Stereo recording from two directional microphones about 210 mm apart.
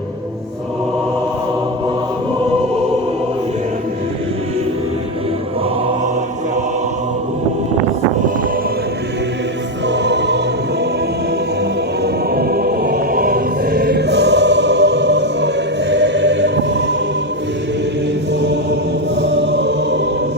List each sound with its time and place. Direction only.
9.8 s music: 55° right (ahead or behind)
12.0 s music: 50° right (ahead or behind)
18.3 s mantra: 55° right (ahead or behind)
19.3 s music: 55° right (ahead or behind)